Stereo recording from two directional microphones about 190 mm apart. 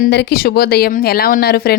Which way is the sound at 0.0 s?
60° left (ahead or behind).